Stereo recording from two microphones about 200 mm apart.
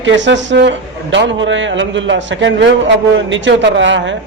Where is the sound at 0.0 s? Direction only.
65° right (ahead or behind).